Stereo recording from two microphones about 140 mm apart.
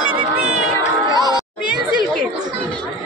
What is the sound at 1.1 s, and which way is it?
Music, 25° left (ahead or behind).